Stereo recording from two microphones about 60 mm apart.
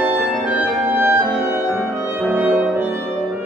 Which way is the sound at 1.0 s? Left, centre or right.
Right.